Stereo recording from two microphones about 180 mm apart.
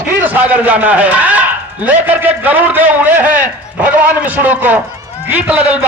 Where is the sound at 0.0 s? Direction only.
10° right (ahead or behind).